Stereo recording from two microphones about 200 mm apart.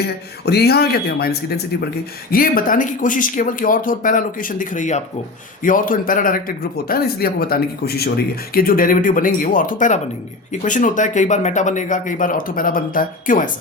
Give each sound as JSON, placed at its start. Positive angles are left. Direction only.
{"t": 0.0, "sound": "a man's voice", "side_deg": 55}